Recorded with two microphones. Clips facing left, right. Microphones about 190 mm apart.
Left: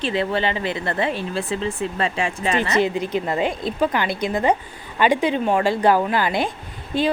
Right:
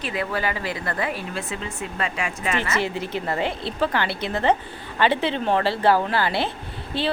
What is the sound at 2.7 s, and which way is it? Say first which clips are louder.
Speech: left 5 dB; 15° left (ahead or behind).